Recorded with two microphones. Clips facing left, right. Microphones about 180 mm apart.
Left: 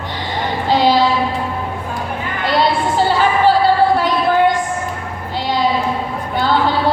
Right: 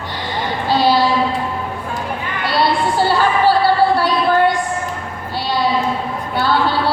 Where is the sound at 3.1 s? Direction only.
20° left (ahead or behind).